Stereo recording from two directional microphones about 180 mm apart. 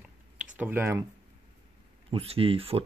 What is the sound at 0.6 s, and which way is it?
Speech, 10° right (ahead or behind).